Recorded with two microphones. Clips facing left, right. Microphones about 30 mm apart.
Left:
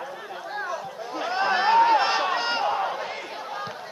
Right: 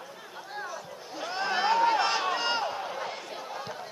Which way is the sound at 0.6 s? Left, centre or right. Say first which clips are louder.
Left 7 dB; left.